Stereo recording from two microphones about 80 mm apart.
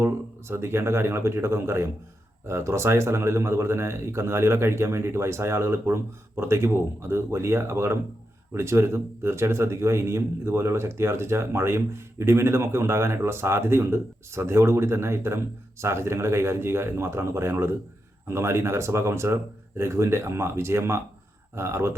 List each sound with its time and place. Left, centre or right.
0.0 s a man's voice: right